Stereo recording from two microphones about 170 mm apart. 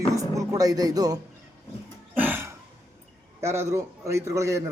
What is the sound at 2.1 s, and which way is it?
Cough, 10° right (ahead or behind).